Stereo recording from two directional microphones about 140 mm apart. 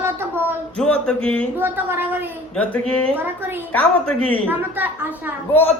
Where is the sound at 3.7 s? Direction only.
10° left (ahead or behind).